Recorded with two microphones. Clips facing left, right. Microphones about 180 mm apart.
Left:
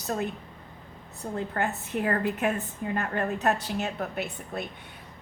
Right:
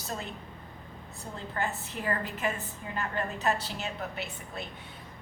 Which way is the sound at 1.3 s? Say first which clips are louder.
Left 4 dB; 60° left (ahead or behind).